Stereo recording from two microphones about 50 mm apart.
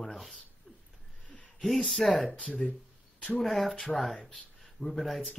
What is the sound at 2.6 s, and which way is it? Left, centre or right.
Speech, centre.